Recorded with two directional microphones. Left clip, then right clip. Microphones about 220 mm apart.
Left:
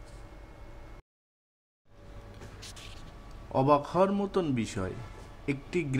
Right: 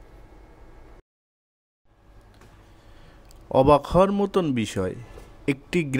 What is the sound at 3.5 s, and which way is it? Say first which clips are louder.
Speech: right 8 dB; 40° right (ahead or behind).